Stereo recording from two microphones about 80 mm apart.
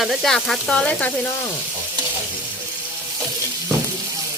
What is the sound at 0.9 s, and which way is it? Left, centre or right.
Speech, centre.